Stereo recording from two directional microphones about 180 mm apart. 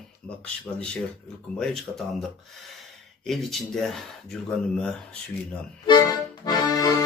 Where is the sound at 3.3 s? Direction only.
Centre (ahead or behind).